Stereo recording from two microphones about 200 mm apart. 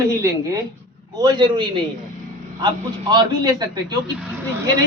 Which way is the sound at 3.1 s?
20° right (ahead or behind).